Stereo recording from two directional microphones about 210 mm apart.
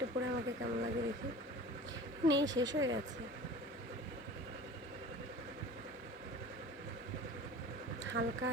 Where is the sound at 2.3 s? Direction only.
60° right (ahead or behind).